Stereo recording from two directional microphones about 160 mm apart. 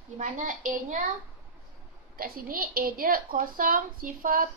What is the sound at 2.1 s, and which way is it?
A woman's voice, 65° right (ahead or behind).